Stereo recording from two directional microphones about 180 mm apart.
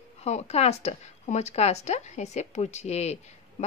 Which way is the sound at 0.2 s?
35° left (ahead or behind).